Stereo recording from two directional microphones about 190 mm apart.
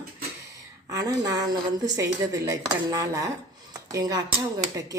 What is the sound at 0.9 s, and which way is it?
Speech, 20° right (ahead or behind).